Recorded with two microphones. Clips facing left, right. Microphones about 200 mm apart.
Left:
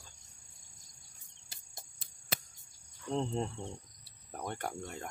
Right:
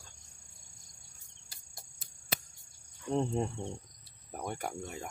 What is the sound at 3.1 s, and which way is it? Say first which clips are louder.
Speech: right 3 dB; 15° right (ahead or behind).